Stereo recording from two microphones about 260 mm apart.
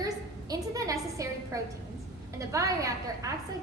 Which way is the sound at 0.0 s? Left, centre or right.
Centre.